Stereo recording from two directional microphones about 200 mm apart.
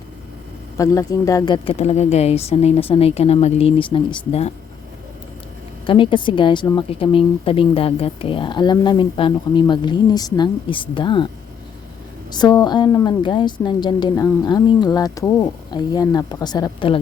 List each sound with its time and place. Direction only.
0.8 s a woman's voice: 15° left (ahead or behind)
5.8 s a woman's voice: 25° left (ahead or behind)
12.3 s a woman's voice: 20° left (ahead or behind)